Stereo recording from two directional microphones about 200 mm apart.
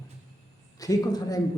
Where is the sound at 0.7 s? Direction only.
15° left (ahead or behind).